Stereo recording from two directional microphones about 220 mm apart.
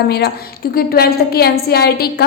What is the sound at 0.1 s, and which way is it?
A woman's voice, 45° left (ahead or behind).